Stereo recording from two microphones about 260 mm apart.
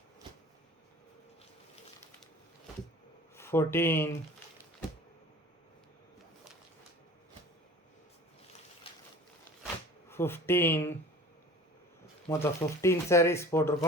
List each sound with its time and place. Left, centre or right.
3.3 s speech: centre
8.9 s a sound: left
10.1 s speech: centre
12.3 s speech: centre